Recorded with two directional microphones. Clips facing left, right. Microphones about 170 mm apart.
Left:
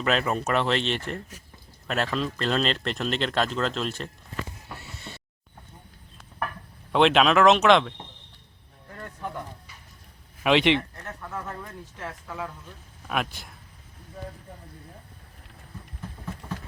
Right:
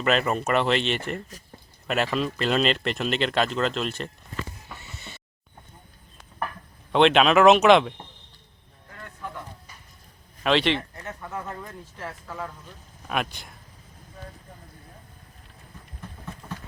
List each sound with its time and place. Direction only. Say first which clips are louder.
0.0 s speech: right 2 dB; centre (ahead or behind)
4.7 s neigh: left 2 dB; centre (ahead or behind)
6.9 s speech: right 2 dB; centre (ahead or behind)
10.4 s speech: left 2 dB; 15° left (ahead or behind)
11.0 s speech: right 1 dB; 5° right (ahead or behind)